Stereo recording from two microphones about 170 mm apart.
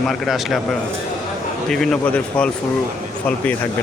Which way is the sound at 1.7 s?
Centre (ahead or behind).